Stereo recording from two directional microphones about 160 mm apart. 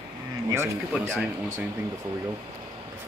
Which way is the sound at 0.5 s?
15° right (ahead or behind).